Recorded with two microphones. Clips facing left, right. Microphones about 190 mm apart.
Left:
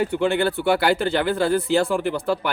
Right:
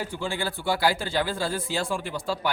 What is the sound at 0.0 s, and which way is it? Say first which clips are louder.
Speech: left 10 dB; 65° left (ahead or behind).